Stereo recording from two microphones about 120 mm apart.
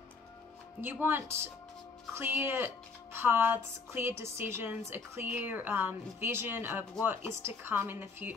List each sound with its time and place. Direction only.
1.0 s a woman's voice: 20° right (ahead or behind)